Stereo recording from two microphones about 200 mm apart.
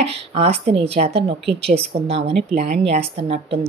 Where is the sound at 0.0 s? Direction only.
30° right (ahead or behind).